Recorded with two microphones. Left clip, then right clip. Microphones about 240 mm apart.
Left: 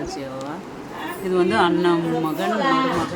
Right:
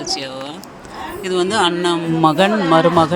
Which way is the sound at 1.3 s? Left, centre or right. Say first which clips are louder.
Right 2 dB; right.